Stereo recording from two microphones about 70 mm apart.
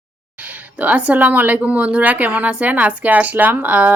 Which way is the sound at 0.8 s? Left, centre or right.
Right.